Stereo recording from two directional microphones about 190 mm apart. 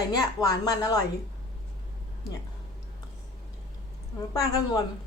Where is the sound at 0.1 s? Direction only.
20° left (ahead or behind).